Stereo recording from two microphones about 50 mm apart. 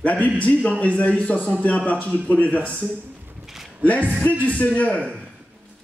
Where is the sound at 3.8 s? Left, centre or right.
Left.